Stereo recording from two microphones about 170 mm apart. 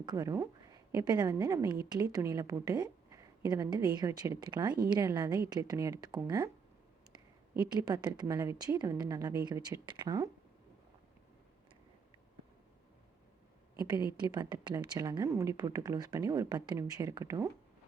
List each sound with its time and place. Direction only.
0.0 s a woman's voice: 20° right (ahead or behind)
7.6 s a woman's voice: 25° right (ahead or behind)
14.1 s a woman's voice: 25° right (ahead or behind)